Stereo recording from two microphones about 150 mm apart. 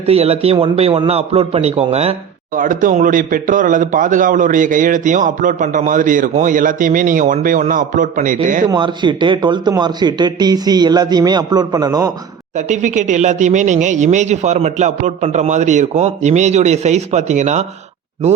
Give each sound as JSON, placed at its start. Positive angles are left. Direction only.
{"t": 0.0, "sound": "a man's voice", "side_deg": -40}
{"t": 2.6, "sound": "speech", "side_deg": -65}
{"t": 8.7, "sound": "speech", "side_deg": -30}
{"t": 12.5, "sound": "speech", "side_deg": -55}